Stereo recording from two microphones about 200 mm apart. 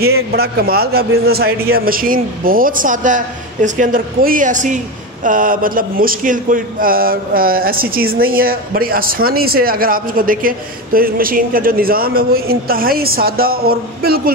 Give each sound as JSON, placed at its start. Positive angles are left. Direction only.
{"t": 0.0, "sound": "speech", "side_deg": -50}